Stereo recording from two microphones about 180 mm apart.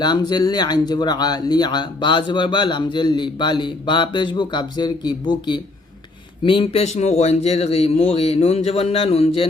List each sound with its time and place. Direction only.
0.0 s speech: 25° left (ahead or behind)